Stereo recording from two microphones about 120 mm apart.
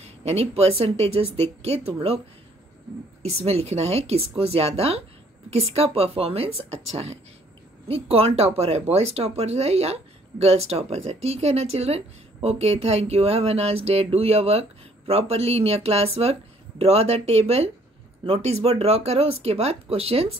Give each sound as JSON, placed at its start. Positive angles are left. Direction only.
{"t": 0.0, "sound": "speech", "side_deg": -65}
{"t": 3.2, "sound": "speech", "side_deg": -60}